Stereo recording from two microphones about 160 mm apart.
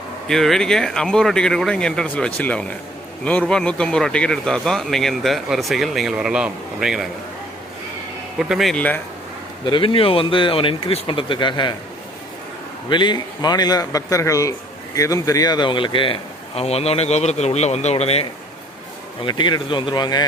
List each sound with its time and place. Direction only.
0.3 s speech: centre (ahead or behind)
8.4 s speech: centre (ahead or behind)
9.6 s speech: 30° left (ahead or behind)
12.9 s a man's voice: 30° left (ahead or behind)
19.2 s a man's voice: 30° left (ahead or behind)